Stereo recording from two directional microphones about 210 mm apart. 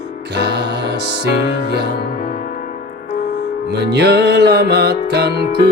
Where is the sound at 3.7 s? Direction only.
55° right (ahead or behind).